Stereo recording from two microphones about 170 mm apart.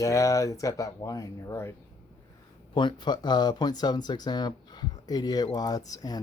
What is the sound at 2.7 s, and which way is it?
Speech, 25° left (ahead or behind).